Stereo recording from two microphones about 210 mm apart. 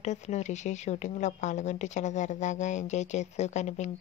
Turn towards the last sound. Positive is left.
turn(degrees=35)  # may be behind; listen again after turning